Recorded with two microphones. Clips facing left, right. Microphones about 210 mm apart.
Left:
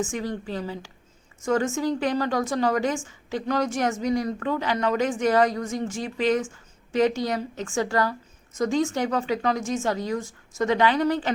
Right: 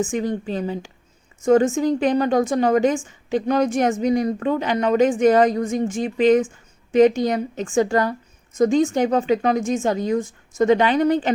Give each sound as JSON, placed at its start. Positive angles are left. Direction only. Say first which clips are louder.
{"t": 0.0, "sound": "a woman's voice", "louder": "right 6 dB", "side_deg": -20}